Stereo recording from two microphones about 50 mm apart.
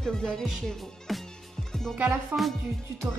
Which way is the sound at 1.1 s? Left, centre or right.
Centre.